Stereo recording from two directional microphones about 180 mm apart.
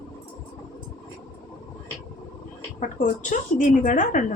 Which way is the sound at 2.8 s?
45° left (ahead or behind).